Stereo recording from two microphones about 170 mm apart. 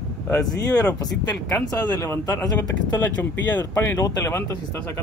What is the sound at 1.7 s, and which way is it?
Speech, 20° left (ahead or behind).